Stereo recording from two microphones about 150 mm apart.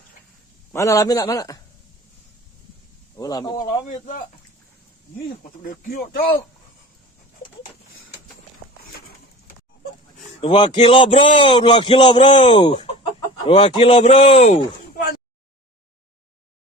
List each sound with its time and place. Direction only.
0.7 s a man's voice: 20° left (ahead or behind)
3.2 s a man's voice: 25° left (ahead or behind)
3.7 s speech: 55° left (ahead or behind)
5.3 s speech: 65° left (ahead or behind); by 6.4 s 85° left
10.2 s a man's voice: 40° left (ahead or behind)